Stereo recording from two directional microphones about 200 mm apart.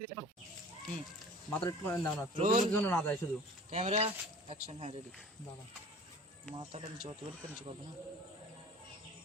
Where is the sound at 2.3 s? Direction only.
35° right (ahead or behind).